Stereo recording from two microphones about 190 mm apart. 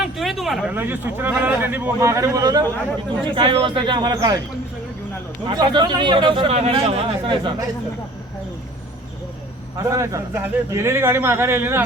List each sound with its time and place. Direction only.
0.0 s speech: centre (ahead or behind); by 4.4 s 20° right (ahead or behind)
5.5 s speech: 25° right (ahead or behind)
9.7 s speech: 15° right (ahead or behind)